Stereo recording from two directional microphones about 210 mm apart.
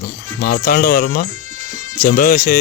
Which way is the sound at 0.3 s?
45° left (ahead or behind).